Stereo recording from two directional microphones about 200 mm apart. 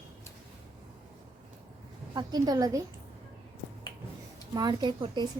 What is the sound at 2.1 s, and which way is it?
Speech, 20° right (ahead or behind).